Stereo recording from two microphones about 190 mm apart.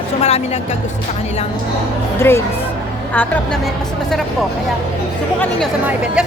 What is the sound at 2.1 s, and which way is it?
A woman's voice, 10° left (ahead or behind).